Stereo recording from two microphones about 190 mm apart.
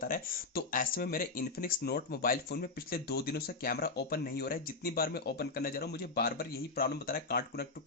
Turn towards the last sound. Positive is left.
turn(degrees=55)  # may be behind; listen again after turning